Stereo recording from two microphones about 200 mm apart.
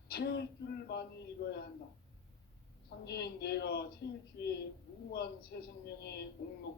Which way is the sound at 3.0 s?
55° left (ahead or behind).